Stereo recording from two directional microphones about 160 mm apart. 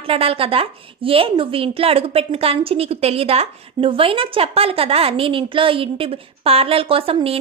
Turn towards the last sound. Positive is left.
turn(degrees=-35)  # may be behind; listen again after turning